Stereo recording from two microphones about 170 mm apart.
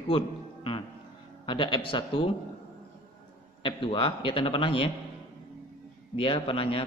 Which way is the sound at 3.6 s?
30° left (ahead or behind).